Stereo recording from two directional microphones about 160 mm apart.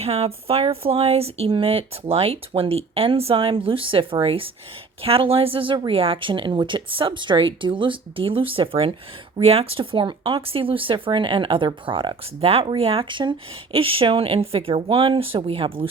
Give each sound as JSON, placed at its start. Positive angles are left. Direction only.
{"t": 0.0, "sound": "speech", "side_deg": -40}